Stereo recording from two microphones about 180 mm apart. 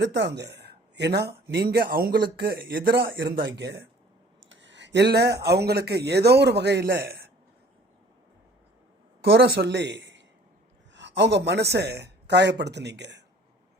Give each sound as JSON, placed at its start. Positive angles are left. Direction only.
{"t": 0.0, "sound": "speech", "side_deg": -75}
{"t": 4.4, "sound": "speech", "side_deg": -90}
{"t": 9.2, "sound": "a man's voice", "side_deg": -60}